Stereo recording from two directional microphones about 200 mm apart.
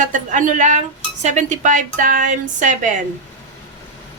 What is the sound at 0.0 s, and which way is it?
A woman's voice, 40° right (ahead or behind).